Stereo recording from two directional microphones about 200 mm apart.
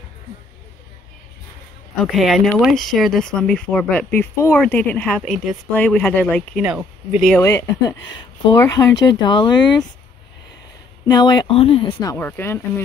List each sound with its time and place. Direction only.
2.0 s speech: centre (ahead or behind)
7.4 s speech: 15° left (ahead or behind)
11.1 s speech: 20° left (ahead or behind)